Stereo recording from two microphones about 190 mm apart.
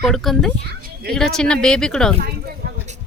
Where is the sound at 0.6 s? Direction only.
55° right (ahead or behind).